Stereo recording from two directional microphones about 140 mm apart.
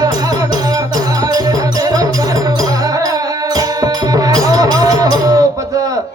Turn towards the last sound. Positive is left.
turn(degrees=-25)  # may be behind; listen again after turning